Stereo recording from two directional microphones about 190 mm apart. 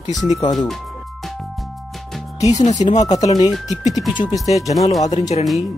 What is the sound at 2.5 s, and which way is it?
Speech, 35° left (ahead or behind).